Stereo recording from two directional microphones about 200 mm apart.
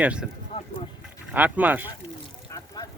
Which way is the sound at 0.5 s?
30° left (ahead or behind).